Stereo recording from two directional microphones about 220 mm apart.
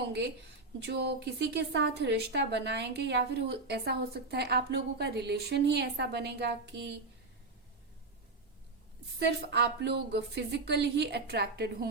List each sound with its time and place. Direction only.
0.0 s a woman's voice: 50° right (ahead or behind)
9.1 s a woman's voice: 50° right (ahead or behind)